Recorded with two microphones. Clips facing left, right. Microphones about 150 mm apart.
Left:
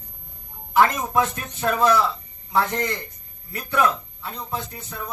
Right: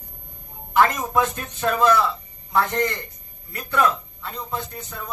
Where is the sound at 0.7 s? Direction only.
5° left (ahead or behind).